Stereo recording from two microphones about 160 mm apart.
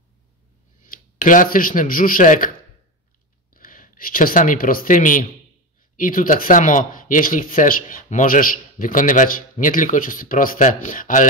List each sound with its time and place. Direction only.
0.8 s a man's voice: 55° left (ahead or behind)
3.5 s speech: 60° left (ahead or behind)